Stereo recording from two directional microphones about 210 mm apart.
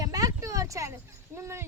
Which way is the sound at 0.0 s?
15° right (ahead or behind).